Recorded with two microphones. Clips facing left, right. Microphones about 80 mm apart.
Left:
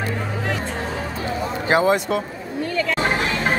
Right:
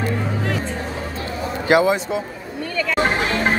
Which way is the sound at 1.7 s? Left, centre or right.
Left.